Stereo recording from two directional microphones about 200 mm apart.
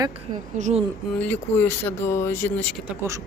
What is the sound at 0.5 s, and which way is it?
Speech, 35° right (ahead or behind).